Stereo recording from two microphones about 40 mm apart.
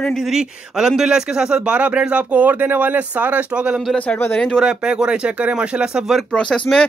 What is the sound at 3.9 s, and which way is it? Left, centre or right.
Speech, left.